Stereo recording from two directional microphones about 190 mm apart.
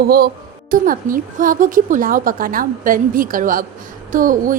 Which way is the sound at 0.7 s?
45° right (ahead or behind).